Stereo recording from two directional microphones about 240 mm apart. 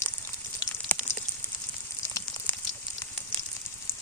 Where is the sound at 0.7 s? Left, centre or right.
Centre.